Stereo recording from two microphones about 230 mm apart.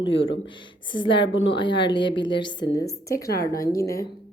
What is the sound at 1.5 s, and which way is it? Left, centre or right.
A woman's voice, left.